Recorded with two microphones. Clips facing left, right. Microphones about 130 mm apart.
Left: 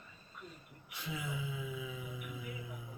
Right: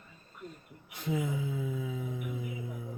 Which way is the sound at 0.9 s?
50° right (ahead or behind).